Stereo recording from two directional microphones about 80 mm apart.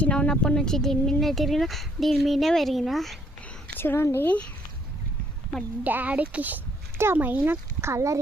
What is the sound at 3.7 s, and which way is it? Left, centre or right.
Speech, left.